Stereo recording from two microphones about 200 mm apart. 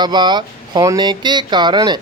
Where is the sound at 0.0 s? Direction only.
20° right (ahead or behind).